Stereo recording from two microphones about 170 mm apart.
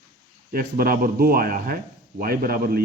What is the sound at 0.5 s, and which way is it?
Speech, 60° right (ahead or behind).